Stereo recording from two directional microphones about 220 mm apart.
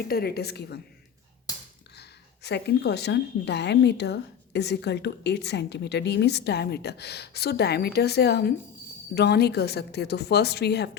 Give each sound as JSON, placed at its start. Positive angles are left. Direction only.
{"t": 0.1, "sound": "a woman's voice", "side_deg": 45}
{"t": 2.0, "sound": "a woman's voice", "side_deg": 50}